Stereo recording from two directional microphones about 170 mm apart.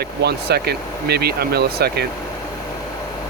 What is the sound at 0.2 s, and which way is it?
Speech, 75° right (ahead or behind).